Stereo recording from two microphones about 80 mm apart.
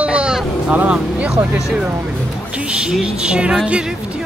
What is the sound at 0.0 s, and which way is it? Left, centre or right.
Vehicle, centre.